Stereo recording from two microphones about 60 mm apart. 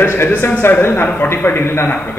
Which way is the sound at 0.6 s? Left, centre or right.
Left.